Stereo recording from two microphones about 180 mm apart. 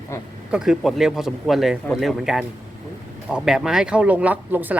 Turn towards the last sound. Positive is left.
turn(degrees=-10)  # may be behind; listen again after turning